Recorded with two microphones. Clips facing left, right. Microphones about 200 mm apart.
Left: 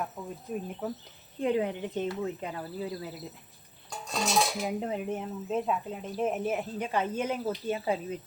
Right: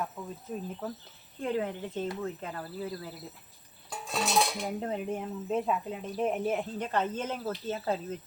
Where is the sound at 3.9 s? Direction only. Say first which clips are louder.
Even; centre (ahead or behind).